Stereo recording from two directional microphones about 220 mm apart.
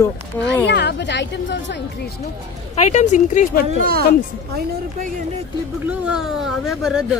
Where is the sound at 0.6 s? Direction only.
50° left (ahead or behind).